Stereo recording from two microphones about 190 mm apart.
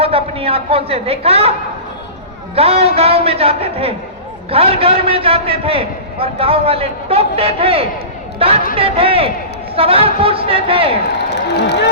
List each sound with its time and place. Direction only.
0.0 s a woman's voice: 30° right (ahead or behind)
2.6 s a man's voice: 30° right (ahead or behind)
11.5 s speech: 60° left (ahead or behind)